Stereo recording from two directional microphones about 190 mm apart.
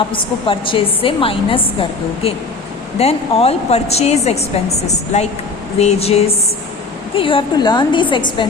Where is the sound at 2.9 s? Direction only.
30° left (ahead or behind).